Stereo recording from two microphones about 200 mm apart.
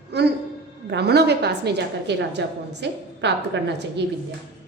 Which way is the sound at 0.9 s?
55° right (ahead or behind).